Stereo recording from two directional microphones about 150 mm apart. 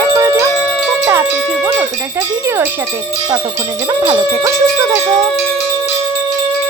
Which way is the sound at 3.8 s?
30° right (ahead or behind).